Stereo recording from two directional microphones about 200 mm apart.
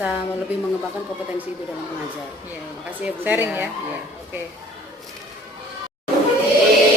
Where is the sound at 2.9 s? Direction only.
10° right (ahead or behind).